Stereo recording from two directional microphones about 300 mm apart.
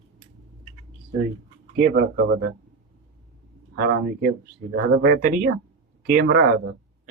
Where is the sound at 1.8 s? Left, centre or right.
Right.